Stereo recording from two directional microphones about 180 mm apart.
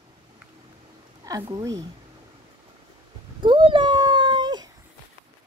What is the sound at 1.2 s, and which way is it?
Speech, 20° right (ahead or behind).